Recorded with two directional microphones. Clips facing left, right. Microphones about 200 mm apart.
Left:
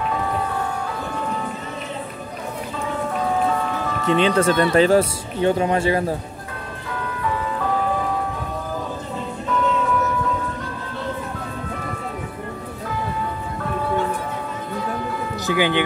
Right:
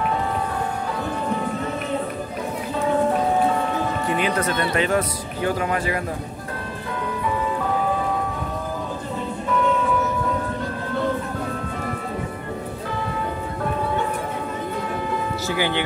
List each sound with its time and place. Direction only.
4.1 s speech: 30° left (ahead or behind)
15.4 s speech: 20° left (ahead or behind)